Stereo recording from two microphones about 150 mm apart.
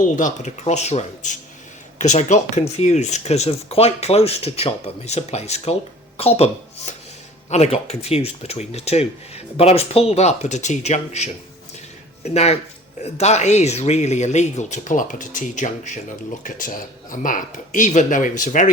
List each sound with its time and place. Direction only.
0.0 s speech: 55° left (ahead or behind)